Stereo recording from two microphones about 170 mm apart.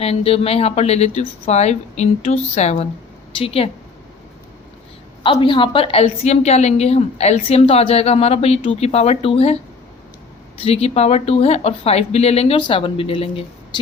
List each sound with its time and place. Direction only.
0.0 s a woman's voice: 35° left (ahead or behind)
5.2 s a woman's voice: 30° left (ahead or behind)
10.6 s a woman's voice: 35° left (ahead or behind)